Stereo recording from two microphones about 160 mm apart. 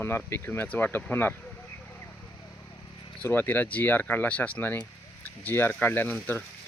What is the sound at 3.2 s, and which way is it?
Speech, 10° left (ahead or behind).